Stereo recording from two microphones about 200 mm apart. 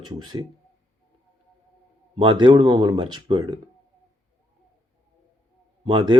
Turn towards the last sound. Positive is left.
turn(degrees=-25)  # may be behind; listen again after turning